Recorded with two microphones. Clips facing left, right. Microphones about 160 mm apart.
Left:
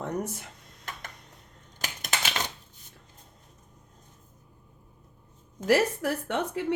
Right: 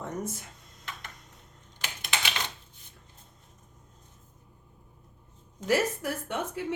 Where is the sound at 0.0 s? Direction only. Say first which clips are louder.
Left 3 dB; 65° left (ahead or behind).